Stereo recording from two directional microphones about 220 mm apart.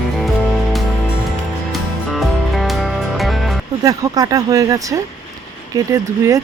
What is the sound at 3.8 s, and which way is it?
Speech, 15° right (ahead or behind).